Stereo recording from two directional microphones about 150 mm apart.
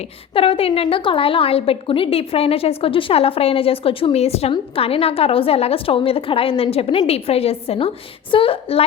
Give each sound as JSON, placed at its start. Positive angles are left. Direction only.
{"t": 0.3, "sound": "a woman's voice", "side_deg": 40}